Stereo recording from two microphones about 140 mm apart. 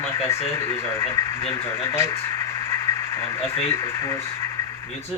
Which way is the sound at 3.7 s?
20° left (ahead or behind).